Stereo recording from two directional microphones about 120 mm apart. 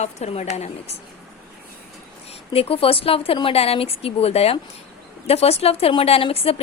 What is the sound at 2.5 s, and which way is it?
A woman's voice, 55° left (ahead or behind).